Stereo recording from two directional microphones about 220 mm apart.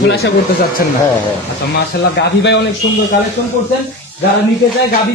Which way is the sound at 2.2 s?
50° left (ahead or behind).